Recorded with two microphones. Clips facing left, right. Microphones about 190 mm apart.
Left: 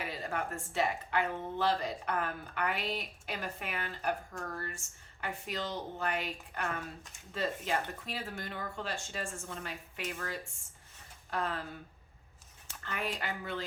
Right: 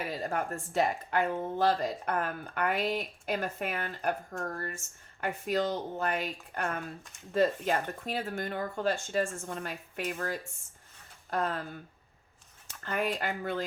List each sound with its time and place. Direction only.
0.1 s a woman's voice: 40° right (ahead or behind)
12.8 s a woman's voice: 45° right (ahead or behind)